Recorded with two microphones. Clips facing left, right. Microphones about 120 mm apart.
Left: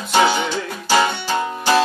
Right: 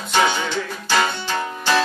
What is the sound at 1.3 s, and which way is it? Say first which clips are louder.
Music: left 3 dB; 15° left (ahead or behind).